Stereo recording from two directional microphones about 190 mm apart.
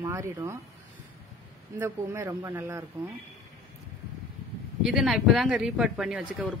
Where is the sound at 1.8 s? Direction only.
15° right (ahead or behind).